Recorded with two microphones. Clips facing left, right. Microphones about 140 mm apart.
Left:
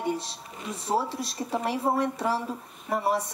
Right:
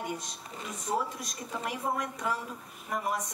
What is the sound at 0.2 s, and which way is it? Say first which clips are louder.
Speech: left 2 dB; 30° left (ahead or behind).